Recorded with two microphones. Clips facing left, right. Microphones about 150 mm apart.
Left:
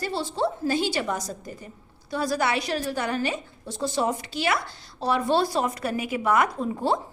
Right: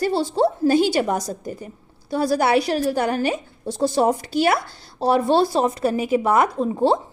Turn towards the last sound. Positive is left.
turn(degrees=-25)  # may be behind; listen again after turning